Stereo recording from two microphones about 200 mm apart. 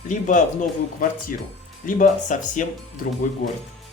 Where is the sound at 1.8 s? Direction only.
40° left (ahead or behind).